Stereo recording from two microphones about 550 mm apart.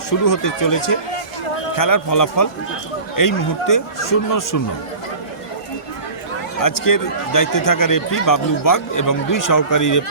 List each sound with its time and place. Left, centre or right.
0.1 s speech: left
6.6 s speech: left